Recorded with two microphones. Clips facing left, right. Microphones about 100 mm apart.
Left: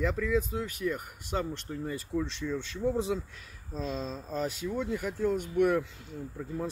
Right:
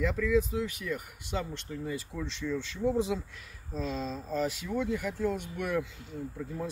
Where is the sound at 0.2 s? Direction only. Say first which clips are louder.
Right 2 dB; 35° left (ahead or behind).